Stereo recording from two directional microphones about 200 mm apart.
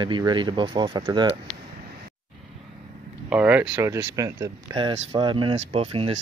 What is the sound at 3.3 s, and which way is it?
Speech, 5° right (ahead or behind).